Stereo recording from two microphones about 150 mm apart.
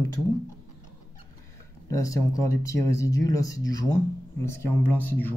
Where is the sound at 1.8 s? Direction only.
20° left (ahead or behind).